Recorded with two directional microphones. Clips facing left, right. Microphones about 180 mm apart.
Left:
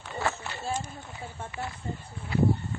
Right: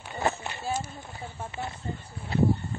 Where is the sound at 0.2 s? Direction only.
20° right (ahead or behind).